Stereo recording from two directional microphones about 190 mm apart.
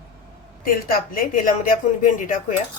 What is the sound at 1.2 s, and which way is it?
Speech, 45° left (ahead or behind).